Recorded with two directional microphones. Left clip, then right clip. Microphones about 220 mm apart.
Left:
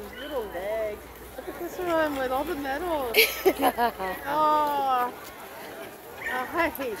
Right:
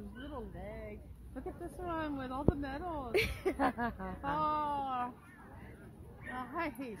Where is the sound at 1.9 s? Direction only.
45° right (ahead or behind).